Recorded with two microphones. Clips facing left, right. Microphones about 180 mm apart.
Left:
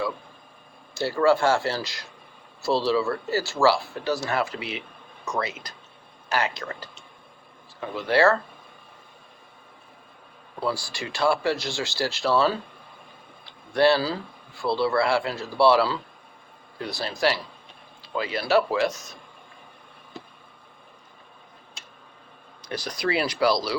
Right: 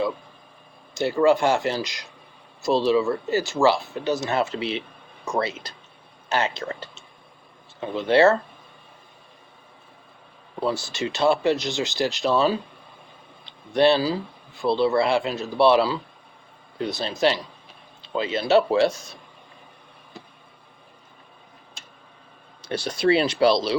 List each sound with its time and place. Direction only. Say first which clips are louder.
0.9 s speech: right 2 dB; 20° right (ahead or behind)
10.6 s speech: right 3 dB; 20° right (ahead or behind)
22.6 s speech: right 6 dB; 30° right (ahead or behind)